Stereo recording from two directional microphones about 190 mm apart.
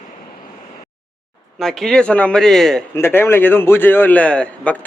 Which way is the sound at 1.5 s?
Centre (ahead or behind).